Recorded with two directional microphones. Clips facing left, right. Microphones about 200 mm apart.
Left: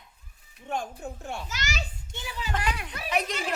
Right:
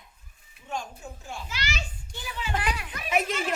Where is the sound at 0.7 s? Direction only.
60° left (ahead or behind).